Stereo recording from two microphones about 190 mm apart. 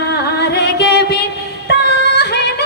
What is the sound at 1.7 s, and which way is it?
Female singing, 60° left (ahead or behind).